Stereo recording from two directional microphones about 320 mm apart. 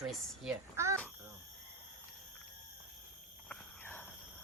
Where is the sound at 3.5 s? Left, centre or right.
Centre.